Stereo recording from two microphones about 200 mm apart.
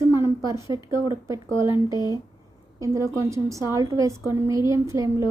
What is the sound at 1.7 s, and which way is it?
A woman's voice, 15° right (ahead or behind).